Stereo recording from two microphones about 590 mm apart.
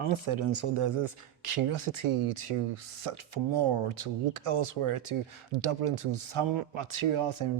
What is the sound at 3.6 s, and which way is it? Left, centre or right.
Speech, right.